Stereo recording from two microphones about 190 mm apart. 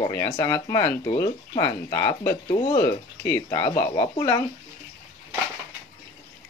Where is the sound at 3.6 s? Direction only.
25° left (ahead or behind).